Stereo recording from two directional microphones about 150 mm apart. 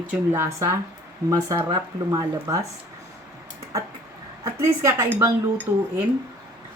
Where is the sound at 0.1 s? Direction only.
15° right (ahead or behind).